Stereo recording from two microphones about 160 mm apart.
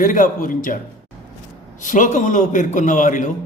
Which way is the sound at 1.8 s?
55° left (ahead or behind).